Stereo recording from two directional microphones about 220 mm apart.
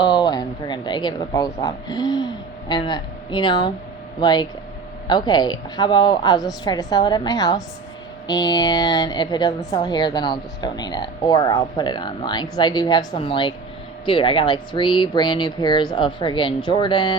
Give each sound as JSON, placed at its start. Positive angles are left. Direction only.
{"t": 0.0, "sound": "a woman's voice", "side_deg": 20}